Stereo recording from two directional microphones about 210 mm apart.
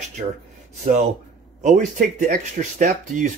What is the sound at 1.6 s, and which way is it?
Speech, 35° right (ahead or behind).